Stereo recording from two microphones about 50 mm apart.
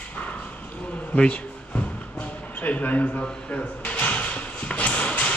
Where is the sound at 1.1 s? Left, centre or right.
Left.